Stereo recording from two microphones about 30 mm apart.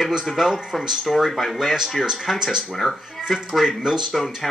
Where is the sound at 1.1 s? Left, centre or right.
Centre.